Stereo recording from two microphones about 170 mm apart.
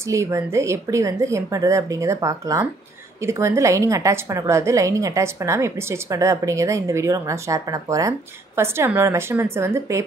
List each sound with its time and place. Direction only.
0.1 s a woman's voice: 15° right (ahead or behind)